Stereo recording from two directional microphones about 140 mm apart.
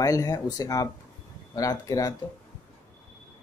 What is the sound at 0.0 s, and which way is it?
Speech, 25° left (ahead or behind).